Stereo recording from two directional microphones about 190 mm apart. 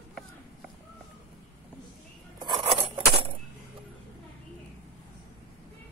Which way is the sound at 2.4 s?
30° right (ahead or behind).